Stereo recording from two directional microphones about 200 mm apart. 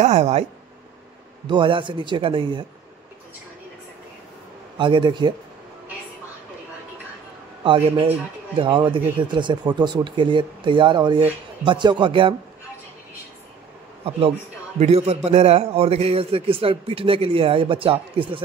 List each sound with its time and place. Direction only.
0.0 s speech: 35° right (ahead or behind)
1.5 s a man's voice: 25° right (ahead or behind)
4.7 s a man's voice: 25° right (ahead or behind)
7.6 s a man's voice: 25° right (ahead or behind)
14.8 s a man's voice: 30° right (ahead or behind)